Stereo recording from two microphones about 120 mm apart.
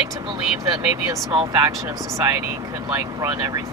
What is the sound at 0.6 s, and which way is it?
Speech, 40° right (ahead or behind).